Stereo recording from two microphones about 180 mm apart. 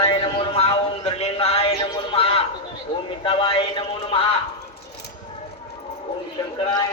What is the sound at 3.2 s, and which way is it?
Speech, 30° left (ahead or behind).